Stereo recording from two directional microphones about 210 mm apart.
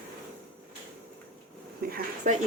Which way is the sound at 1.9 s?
40° right (ahead or behind).